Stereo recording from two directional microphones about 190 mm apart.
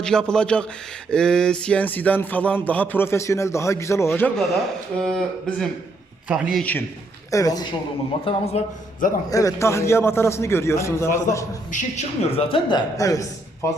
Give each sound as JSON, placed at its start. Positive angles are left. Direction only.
{"t": 0.0, "sound": "speech", "side_deg": 5}
{"t": 4.4, "sound": "speech", "side_deg": 0}
{"t": 7.3, "sound": "a man's voice", "side_deg": 20}
{"t": 8.2, "sound": "a man's voice", "side_deg": 35}
{"t": 9.3, "sound": "speech", "side_deg": 20}
{"t": 11.7, "sound": "a man's voice", "side_deg": 40}